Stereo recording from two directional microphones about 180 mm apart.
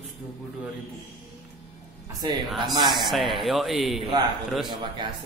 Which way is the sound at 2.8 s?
25° right (ahead or behind).